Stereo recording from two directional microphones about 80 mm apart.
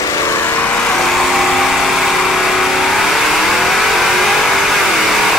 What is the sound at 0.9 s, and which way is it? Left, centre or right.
Vehicle, centre.